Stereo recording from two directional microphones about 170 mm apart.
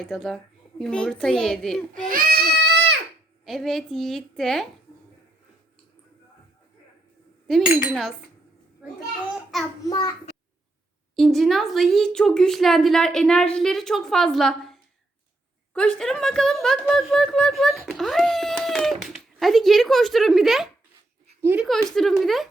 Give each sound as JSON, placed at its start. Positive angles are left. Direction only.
{"t": 0.0, "sound": "speech", "side_deg": 0}
{"t": 2.0, "sound": "baby cry", "side_deg": -60}
{"t": 3.4, "sound": "speech", "side_deg": 0}
{"t": 7.4, "sound": "cutlery", "side_deg": 0}
{"t": 9.3, "sound": "child singing", "side_deg": 0}
{"t": 11.1, "sound": "a woman's voice", "side_deg": 0}
{"t": 21.7, "sound": "speech", "side_deg": 0}